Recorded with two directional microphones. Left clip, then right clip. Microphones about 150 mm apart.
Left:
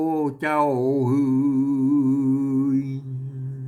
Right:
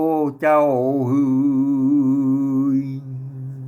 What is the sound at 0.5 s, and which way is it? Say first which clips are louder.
Music: right 3 dB; 35° left (ahead or behind).